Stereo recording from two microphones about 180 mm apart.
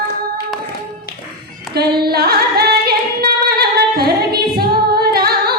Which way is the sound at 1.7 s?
60° right (ahead or behind).